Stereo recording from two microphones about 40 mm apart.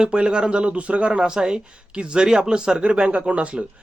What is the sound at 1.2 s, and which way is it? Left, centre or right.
Speech, centre.